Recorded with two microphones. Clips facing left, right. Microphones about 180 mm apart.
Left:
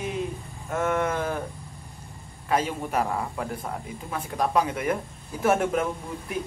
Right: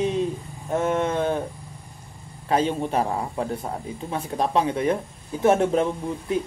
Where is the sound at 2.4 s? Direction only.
30° right (ahead or behind).